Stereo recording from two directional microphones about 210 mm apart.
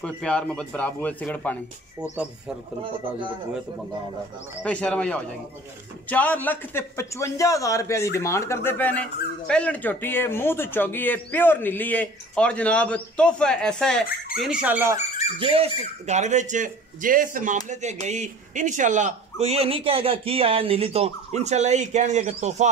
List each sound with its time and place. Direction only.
0.0 s speech: 5° left (ahead or behind)
4.6 s speech: 5° left (ahead or behind)
15.3 s speech: 25° right (ahead or behind)